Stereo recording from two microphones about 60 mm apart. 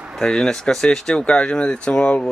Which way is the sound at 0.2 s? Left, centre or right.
Centre.